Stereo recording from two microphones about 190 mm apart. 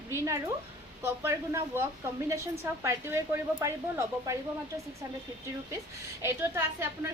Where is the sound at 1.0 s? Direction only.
15° right (ahead or behind).